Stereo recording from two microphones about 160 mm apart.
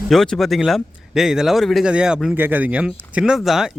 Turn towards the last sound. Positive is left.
turn(degrees=0)  # may be behind; listen again after turning